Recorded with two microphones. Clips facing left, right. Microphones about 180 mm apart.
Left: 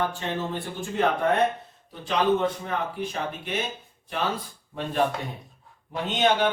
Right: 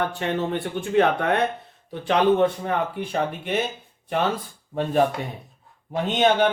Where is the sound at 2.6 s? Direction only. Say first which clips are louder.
Right 4 dB; 60° right (ahead or behind).